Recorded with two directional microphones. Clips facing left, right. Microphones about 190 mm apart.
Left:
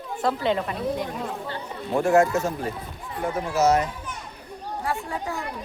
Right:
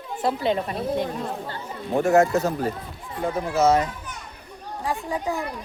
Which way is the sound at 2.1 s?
25° right (ahead or behind).